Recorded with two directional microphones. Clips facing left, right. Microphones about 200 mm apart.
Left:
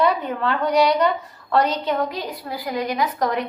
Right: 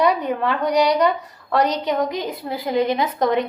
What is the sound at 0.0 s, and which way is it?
A woman's voice, 15° right (ahead or behind).